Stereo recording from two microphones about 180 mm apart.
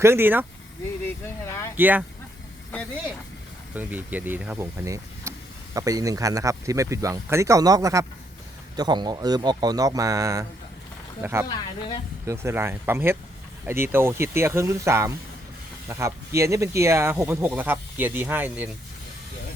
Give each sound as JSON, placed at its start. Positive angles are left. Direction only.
{"t": 0.0, "sound": "speech", "side_deg": -10}
{"t": 1.0, "sound": "speech", "side_deg": 15}
{"t": 1.7, "sound": "speech", "side_deg": -10}
{"t": 3.8, "sound": "speech", "side_deg": -10}